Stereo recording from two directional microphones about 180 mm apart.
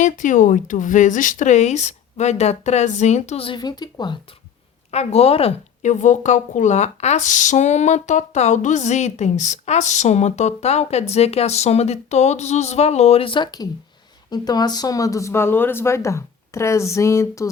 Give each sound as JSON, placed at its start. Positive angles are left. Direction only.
{"t": 0.0, "sound": "speech", "side_deg": 45}
{"t": 4.9, "sound": "speech", "side_deg": 35}